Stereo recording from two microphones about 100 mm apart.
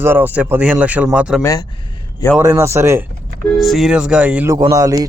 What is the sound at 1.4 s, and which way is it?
Speech, 35° left (ahead or behind).